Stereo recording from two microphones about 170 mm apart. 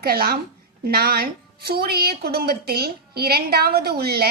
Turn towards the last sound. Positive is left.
turn(degrees=-65)  # may be behind; listen again after turning